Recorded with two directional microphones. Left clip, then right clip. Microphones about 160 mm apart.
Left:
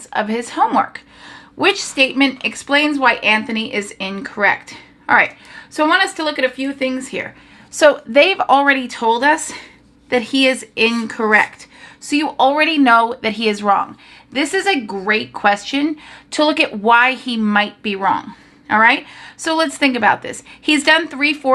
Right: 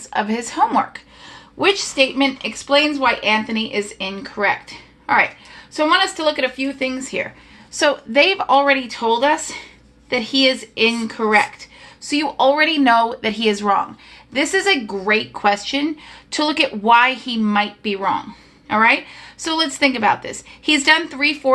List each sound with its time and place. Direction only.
0.1 s a woman's voice: 15° left (ahead or behind); by 4.5 s 35° left (ahead or behind)
5.7 s a woman's voice: 30° left (ahead or behind)
12.0 s a woman's voice: 30° left (ahead or behind)